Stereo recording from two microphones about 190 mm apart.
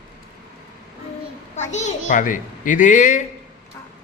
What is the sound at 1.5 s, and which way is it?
A child's voice, 40° left (ahead or behind).